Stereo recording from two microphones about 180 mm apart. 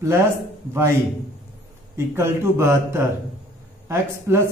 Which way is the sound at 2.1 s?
15° right (ahead or behind).